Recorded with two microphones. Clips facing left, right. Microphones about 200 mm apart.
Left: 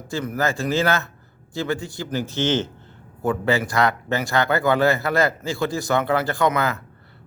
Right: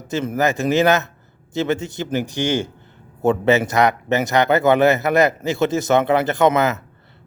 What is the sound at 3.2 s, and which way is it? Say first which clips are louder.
A man's voice: right 5 dB; 25° right (ahead or behind).